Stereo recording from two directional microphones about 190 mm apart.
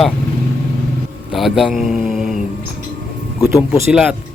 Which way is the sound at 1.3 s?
Centre (ahead or behind).